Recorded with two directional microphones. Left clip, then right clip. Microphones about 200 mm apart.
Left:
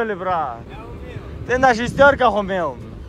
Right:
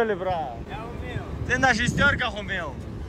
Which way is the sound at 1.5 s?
10° right (ahead or behind).